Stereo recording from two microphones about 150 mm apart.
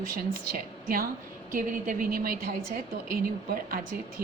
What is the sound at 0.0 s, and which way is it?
A woman's voice, 70° right (ahead or behind).